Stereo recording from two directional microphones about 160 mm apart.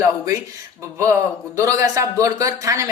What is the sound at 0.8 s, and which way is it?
A woman's voice, 15° right (ahead or behind).